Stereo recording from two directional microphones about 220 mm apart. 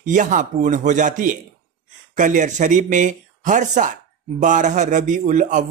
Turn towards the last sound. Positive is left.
turn(degrees=-35)  # may be behind; listen again after turning